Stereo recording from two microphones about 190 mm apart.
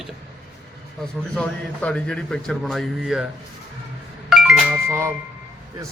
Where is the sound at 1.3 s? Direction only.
5° left (ahead or behind).